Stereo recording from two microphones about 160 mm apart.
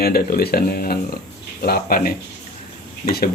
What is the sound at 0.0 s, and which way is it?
Speech, 70° left (ahead or behind).